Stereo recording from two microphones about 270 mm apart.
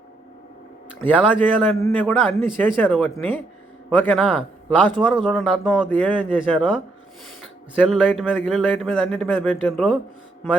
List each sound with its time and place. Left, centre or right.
1.0 s a man's voice: centre